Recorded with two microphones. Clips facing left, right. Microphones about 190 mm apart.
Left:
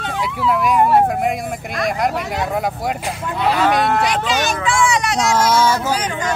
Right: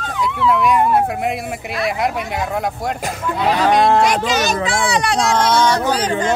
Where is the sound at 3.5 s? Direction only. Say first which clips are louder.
Right 4 dB; 30° right (ahead or behind).